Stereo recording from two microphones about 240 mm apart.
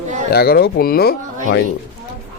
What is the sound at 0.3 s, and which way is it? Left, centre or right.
Speech, left.